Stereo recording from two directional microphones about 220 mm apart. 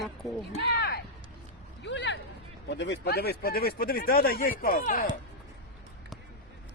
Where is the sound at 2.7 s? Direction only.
55° left (ahead or behind); by 5.1 s 40° left (ahead or behind).